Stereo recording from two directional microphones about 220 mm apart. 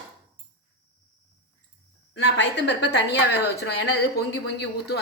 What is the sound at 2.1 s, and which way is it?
A woman's voice, 55° left (ahead or behind).